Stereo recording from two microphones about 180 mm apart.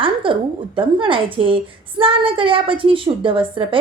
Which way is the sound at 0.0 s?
30° right (ahead or behind).